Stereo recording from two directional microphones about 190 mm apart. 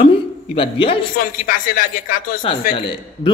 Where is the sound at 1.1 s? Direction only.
45° left (ahead or behind).